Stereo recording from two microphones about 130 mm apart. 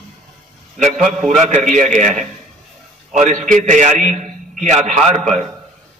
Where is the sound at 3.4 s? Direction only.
75° right (ahead or behind).